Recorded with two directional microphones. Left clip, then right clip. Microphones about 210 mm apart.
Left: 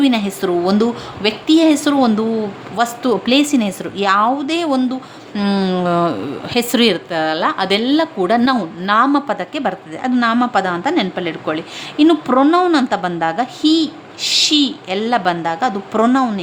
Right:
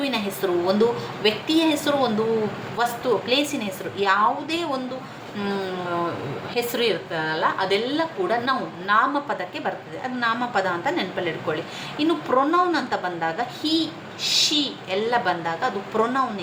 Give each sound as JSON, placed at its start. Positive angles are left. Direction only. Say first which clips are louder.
{"t": 0.0, "sound": "a woman's voice", "louder": "left 8 dB", "side_deg": 55}